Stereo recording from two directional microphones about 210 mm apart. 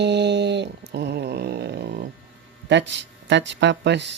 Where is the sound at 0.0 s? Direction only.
55° right (ahead or behind).